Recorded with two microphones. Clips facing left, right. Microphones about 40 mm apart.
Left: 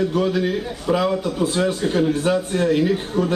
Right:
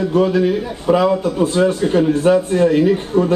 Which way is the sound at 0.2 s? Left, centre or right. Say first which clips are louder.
Right 5 dB; right.